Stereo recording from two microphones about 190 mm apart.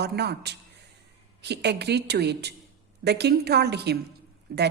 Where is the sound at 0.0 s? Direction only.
60° right (ahead or behind).